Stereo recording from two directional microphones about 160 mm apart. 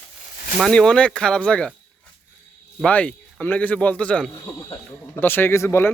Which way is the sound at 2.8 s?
5° left (ahead or behind).